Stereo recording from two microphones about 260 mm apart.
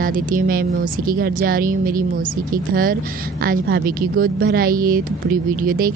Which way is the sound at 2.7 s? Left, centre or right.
Right.